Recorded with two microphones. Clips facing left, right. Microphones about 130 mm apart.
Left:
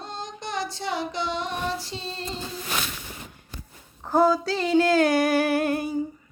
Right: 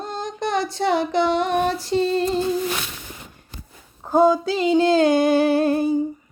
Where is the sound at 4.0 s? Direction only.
20° right (ahead or behind).